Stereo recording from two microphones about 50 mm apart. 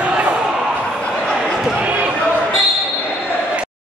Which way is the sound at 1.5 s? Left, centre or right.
Centre.